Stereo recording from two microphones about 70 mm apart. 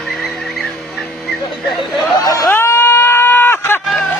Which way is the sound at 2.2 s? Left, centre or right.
Left.